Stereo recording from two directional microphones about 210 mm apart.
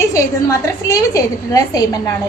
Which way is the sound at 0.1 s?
15° left (ahead or behind).